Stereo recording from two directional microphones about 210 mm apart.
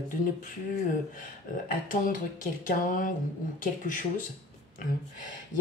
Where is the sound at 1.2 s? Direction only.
40° left (ahead or behind).